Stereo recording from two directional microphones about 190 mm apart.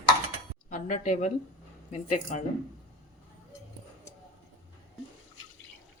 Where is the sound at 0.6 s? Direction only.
40° left (ahead or behind).